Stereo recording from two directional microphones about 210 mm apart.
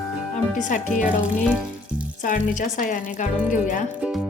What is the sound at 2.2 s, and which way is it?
Speech, 40° left (ahead or behind).